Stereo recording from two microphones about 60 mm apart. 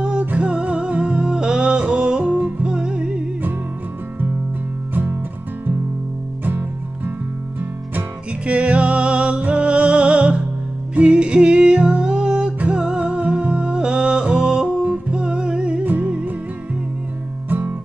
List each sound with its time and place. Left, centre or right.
0.0 s music: centre
8.5 s music: centre
17.5 s guitar: right